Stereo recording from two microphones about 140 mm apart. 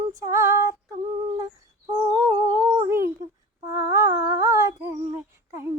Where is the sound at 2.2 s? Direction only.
20° right (ahead or behind).